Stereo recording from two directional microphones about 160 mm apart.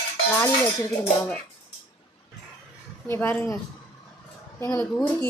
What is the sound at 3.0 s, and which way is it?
Speech, 15° left (ahead or behind).